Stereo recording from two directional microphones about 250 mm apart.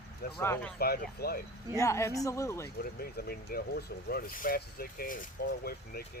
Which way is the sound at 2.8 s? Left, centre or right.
Left.